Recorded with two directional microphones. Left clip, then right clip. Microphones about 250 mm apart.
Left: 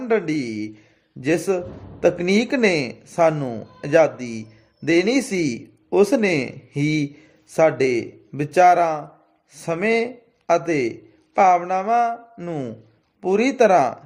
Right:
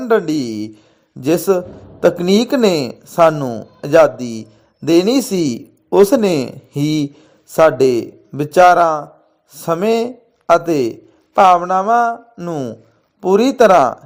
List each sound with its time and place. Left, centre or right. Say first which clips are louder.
0.0 s a man's voice: right 6 dB; centre